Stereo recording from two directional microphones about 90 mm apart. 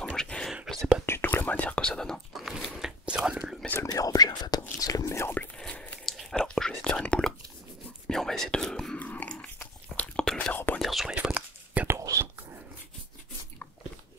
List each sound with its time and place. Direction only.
0.0 s whispering: 10° left (ahead or behind)
1.0 s whispering: 25° left (ahead or behind); by 2.4 s 5° left (ahead or behind)
2.7 s whispering: 5° right (ahead or behind)
3.8 s whispering: 40° left (ahead or behind)
5.6 s a sound: 10° left (ahead or behind)
6.1 s whispering: 5° left (ahead or behind)
9.0 s dog: 20° left (ahead or behind)
9.6 s whispering: 10° left (ahead or behind)
10.8 s whispering: centre (ahead or behind)
11.1 s whispering: 15° right (ahead or behind)
12.0 s whispering: 35° right (ahead or behind)